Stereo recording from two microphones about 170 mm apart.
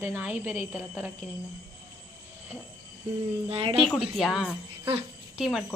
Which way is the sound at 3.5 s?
35° right (ahead or behind).